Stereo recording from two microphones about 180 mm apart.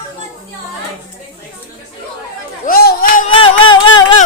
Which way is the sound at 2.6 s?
55° left (ahead or behind).